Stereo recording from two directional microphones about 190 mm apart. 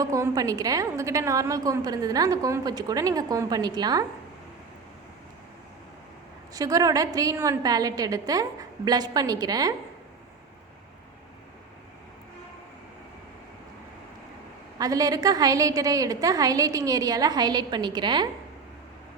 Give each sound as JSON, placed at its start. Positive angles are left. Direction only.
{"t": 0.0, "sound": "a woman's voice", "side_deg": -15}
{"t": 6.5, "sound": "a woman's voice", "side_deg": -20}
{"t": 14.8, "sound": "a woman's voice", "side_deg": -20}